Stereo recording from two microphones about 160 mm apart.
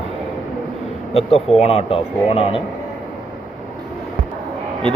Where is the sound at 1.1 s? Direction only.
40° left (ahead or behind).